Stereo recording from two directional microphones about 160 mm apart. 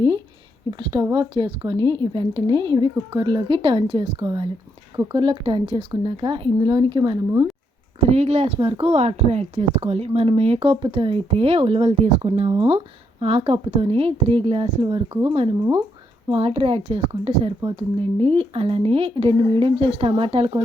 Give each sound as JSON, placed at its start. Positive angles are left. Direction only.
{"t": 0.8, "sound": "speech", "side_deg": -25}
{"t": 8.1, "sound": "speech", "side_deg": -40}